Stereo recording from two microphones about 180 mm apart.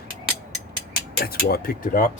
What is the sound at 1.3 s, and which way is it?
Speech, 55° left (ahead or behind).